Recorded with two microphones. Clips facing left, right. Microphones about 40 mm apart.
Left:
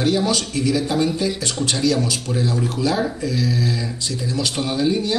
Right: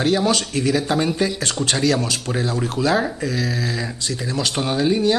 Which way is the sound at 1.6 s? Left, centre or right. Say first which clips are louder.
Even; right.